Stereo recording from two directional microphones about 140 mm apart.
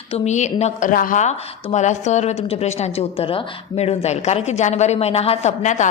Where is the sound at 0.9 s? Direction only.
80° left; by 5.8 s 60° left (ahead or behind).